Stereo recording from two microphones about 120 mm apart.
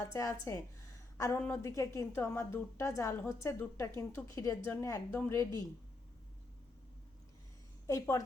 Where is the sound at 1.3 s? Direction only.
15° left (ahead or behind).